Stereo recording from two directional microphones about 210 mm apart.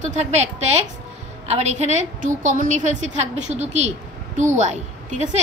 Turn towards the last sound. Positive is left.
turn(degrees=-35)  # may be behind; listen again after turning